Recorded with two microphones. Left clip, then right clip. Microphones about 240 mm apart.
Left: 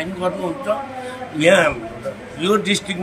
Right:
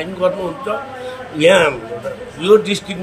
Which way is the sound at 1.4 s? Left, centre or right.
Centre.